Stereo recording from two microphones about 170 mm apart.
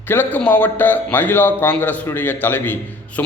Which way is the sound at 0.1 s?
10° left (ahead or behind).